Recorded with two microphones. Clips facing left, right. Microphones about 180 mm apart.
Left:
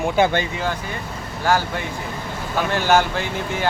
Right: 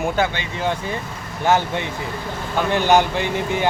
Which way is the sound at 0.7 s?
30° right (ahead or behind).